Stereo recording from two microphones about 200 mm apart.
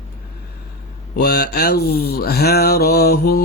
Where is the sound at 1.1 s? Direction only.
50° left (ahead or behind).